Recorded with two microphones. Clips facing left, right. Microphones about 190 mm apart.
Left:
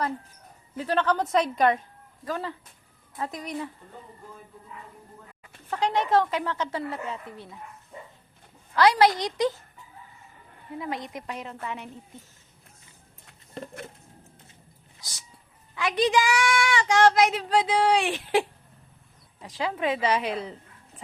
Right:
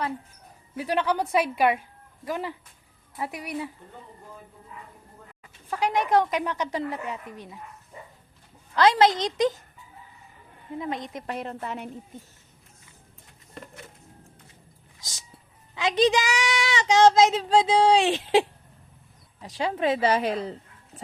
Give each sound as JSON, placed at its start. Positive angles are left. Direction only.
{"t": 0.8, "sound": "speech", "side_deg": -10}
{"t": 5.7, "sound": "speech", "side_deg": -10}
{"t": 8.7, "sound": "a woman's voice", "side_deg": -20}
{"t": 10.8, "sound": "a woman's voice", "side_deg": -20}
{"t": 11.3, "sound": "a woman's voice", "side_deg": -55}
{"t": 11.6, "sound": "speech", "side_deg": -40}
{"t": 15.7, "sound": "a woman's voice", "side_deg": -20}
{"t": 19.7, "sound": "speech", "side_deg": -40}